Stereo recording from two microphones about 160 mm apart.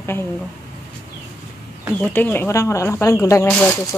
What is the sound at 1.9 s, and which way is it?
Speech, 10° left (ahead or behind).